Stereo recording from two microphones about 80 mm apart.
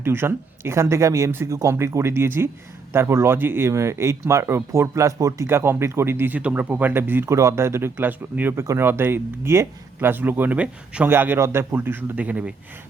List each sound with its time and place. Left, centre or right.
0.0 s speech: right
7.9 s speech: right
8.6 s speech: right
8.9 s speech: right